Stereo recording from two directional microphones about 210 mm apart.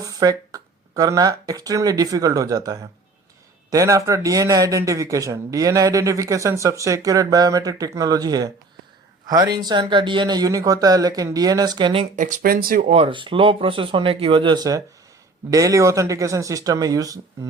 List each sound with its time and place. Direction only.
0.0 s a man's voice: 15° right (ahead or behind)
12.1 s speech: 40° right (ahead or behind)
12.9 s a man's voice: 25° right (ahead or behind)